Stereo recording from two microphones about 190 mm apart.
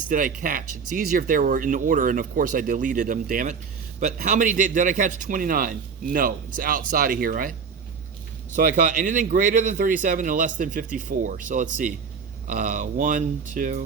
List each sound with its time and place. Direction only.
0.1 s a man's voice: 45° right (ahead or behind)
8.5 s a man's voice: 45° right (ahead or behind)